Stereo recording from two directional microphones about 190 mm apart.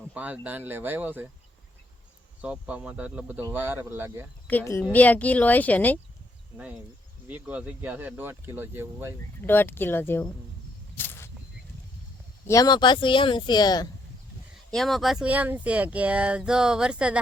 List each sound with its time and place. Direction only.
0.1 s speech: 10° right (ahead or behind)
2.4 s speech: 5° right (ahead or behind)
4.4 s speech: 10° left (ahead or behind)
7.3 s speech: 10° right (ahead or behind)
9.5 s speech: 10° left (ahead or behind)
10.9 s a sound: 10° left (ahead or behind)
12.5 s speech: 20° left (ahead or behind)
14.7 s speech: centre (ahead or behind)